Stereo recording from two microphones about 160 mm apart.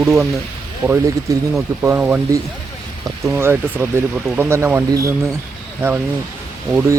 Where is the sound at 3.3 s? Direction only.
15° right (ahead or behind).